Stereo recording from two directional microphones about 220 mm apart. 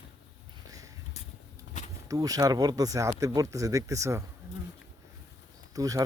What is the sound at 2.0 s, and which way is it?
Speech, 15° right (ahead or behind).